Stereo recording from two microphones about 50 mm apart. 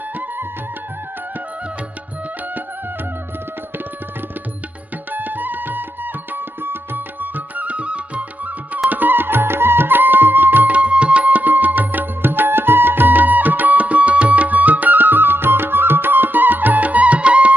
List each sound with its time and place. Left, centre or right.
5.1 s music: right
8.9 s music: right